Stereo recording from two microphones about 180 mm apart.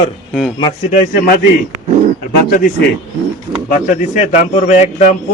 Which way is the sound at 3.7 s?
45° left (ahead or behind).